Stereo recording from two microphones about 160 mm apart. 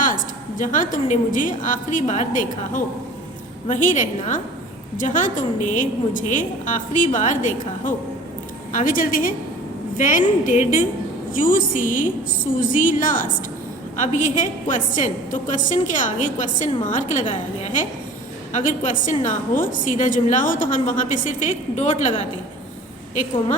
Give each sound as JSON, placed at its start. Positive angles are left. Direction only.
{"t": 0.6, "sound": "a woman's voice", "side_deg": 55}